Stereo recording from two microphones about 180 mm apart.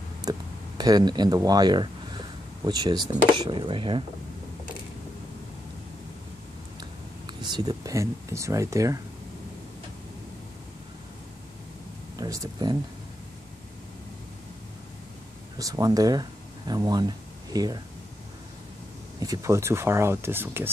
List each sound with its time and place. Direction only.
0.2 s a sound: 20° right (ahead or behind)
3.3 s speech: 25° right (ahead or behind)
6.8 s speech: 25° right (ahead or behind)
12.2 s speech: 20° right (ahead or behind)
15.5 s speech: 20° right (ahead or behind)
19.1 s speech: 20° right (ahead or behind)